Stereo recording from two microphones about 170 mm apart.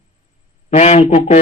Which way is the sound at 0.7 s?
40° left (ahead or behind).